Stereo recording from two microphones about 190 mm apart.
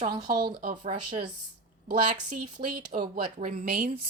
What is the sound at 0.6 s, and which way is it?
Speech, 45° right (ahead or behind).